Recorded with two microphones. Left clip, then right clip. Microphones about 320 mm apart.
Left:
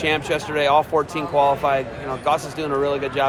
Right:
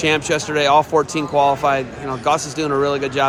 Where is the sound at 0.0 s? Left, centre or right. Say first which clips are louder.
Right 3 dB; right.